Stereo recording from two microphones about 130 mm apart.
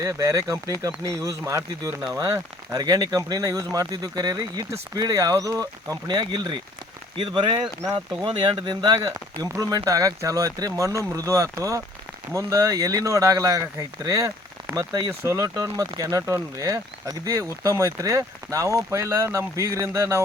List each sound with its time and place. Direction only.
0.0 s speech: 25° right (ahead or behind)